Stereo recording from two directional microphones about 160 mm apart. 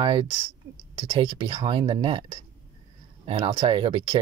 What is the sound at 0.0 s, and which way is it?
Speech, 30° right (ahead or behind).